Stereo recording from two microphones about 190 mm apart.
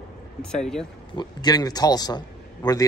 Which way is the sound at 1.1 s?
25° left (ahead or behind).